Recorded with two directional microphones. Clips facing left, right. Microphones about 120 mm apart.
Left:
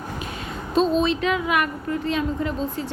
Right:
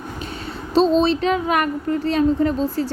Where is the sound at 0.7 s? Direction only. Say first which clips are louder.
Right 4 dB; 30° right (ahead or behind).